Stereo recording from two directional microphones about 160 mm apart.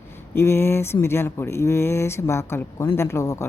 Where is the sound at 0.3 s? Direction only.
15° left (ahead or behind).